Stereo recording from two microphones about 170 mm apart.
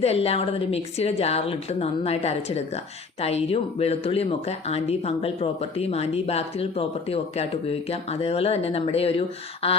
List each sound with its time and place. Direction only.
0.0 s speech: 35° left (ahead or behind)